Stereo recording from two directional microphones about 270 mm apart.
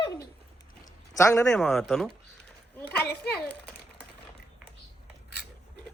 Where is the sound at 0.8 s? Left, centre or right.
Centre.